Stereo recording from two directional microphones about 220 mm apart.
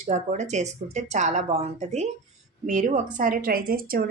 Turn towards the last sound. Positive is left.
turn(degrees=-40)  # may be behind; listen again after turning